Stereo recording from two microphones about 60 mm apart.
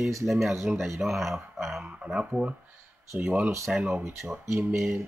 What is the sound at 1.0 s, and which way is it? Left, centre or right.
Speech, centre.